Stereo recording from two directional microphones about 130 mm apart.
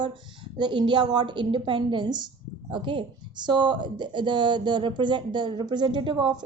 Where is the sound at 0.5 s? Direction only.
35° right (ahead or behind).